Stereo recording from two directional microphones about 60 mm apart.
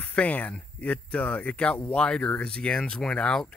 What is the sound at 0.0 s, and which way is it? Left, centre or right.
Speech, left.